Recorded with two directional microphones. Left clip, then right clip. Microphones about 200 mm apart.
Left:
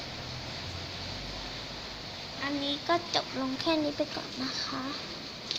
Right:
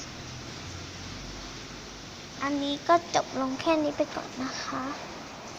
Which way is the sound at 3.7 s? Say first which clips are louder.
Right 4 dB; 5° right (ahead or behind).